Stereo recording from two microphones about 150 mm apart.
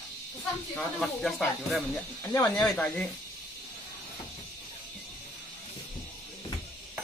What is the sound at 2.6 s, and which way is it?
Speech, 5° left (ahead or behind).